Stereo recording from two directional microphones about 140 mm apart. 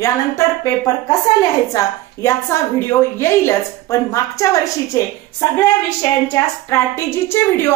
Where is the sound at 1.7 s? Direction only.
20° left (ahead or behind).